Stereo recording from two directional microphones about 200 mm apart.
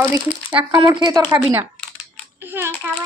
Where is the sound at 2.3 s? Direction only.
10° right (ahead or behind).